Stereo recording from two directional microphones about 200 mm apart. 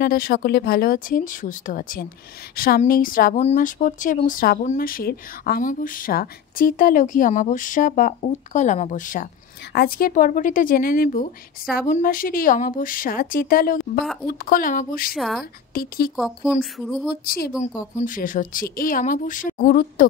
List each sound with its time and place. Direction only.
0.0 s a woman's voice: 45° left (ahead or behind)
15.1 s speech: centre (ahead or behind)
15.7 s a woman's voice: 45° left (ahead or behind)
16.2 s speech: centre (ahead or behind)
17.1 s a woman's voice: 50° left (ahead or behind)